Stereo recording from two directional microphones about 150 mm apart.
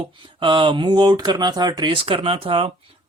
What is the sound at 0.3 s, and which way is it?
Speech, 35° right (ahead or behind).